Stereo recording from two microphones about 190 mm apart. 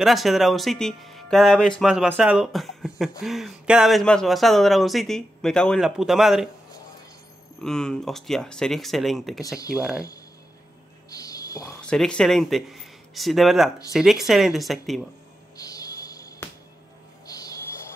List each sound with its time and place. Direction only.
0.0 s speech: centre (ahead or behind)
7.6 s speech: 5° left (ahead or behind)
9.4 s speech: 20° left (ahead or behind)
9.7 s speech: 5° right (ahead or behind)
11.1 s a sound: 20° left (ahead or behind)
11.8 s speech: 5° left (ahead or behind)
15.5 s a sound: 20° left (ahead or behind)